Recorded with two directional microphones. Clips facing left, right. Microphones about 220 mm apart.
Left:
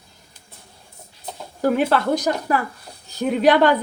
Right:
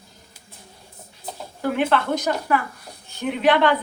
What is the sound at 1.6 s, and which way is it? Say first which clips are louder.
A woman's voice: left 3 dB; 40° left (ahead or behind).